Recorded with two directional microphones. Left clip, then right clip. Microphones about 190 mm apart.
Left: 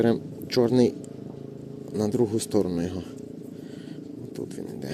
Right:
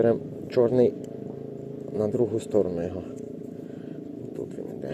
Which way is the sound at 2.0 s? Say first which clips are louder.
Even; 55° left (ahead or behind).